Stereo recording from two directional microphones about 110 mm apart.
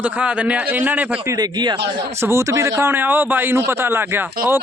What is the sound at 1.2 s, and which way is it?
Speech, 40° right (ahead or behind).